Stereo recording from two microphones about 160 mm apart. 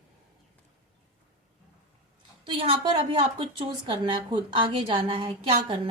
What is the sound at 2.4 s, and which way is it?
A woman's voice, 30° right (ahead or behind).